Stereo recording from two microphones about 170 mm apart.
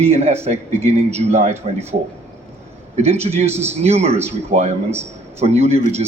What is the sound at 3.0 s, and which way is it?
A man's voice, 40° right (ahead or behind).